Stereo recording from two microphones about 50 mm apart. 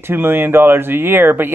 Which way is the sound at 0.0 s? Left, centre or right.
Right.